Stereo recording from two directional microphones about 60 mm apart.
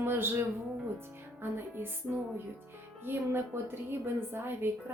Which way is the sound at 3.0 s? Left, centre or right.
Right.